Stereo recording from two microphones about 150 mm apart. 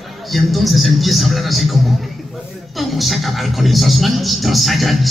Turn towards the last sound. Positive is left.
turn(degrees=0)  # may be behind; listen again after turning